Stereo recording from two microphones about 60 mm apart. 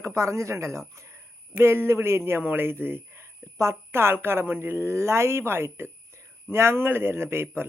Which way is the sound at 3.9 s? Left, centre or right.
Right.